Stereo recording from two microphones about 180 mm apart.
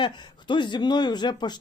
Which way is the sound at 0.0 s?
25° left (ahead or behind).